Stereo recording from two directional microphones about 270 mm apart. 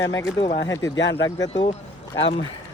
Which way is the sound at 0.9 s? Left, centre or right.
Left.